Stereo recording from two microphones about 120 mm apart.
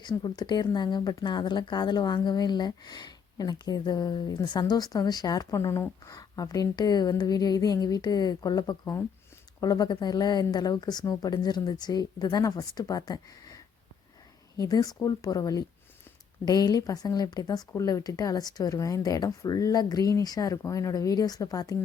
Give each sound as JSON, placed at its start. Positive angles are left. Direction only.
{"t": 0.0, "sound": "speech", "side_deg": 35}